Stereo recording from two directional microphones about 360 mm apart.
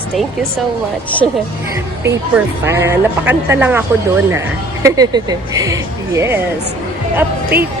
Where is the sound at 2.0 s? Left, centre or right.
Centre.